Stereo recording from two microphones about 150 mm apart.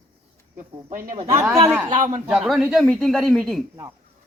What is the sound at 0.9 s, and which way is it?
Speech, 65° right (ahead or behind).